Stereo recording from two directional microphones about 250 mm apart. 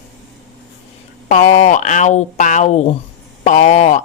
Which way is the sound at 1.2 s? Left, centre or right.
Left.